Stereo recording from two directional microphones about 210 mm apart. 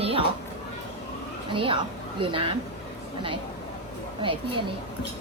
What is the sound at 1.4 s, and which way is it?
A woman's voice, 25° right (ahead or behind).